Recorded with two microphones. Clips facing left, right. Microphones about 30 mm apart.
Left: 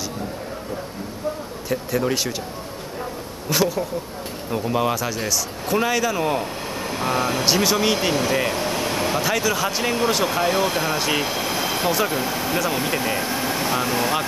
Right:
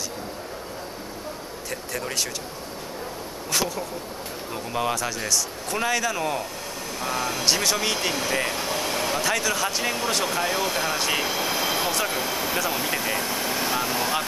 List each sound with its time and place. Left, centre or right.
1.7 s speech: centre
3.4 s a man's voice: centre
6.9 s speech: left
7.4 s speech: centre